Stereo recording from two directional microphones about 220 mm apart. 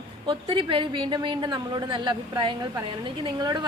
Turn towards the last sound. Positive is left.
turn(degrees=-20)  # may be behind; listen again after turning